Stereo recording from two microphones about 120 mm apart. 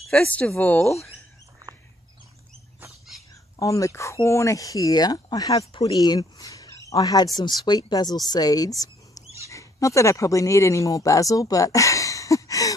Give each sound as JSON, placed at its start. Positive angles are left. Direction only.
{"t": 0.0, "sound": "speech", "side_deg": 5}
{"t": 1.7, "sound": "a sound", "side_deg": -25}
{"t": 3.5, "sound": "speech", "side_deg": 30}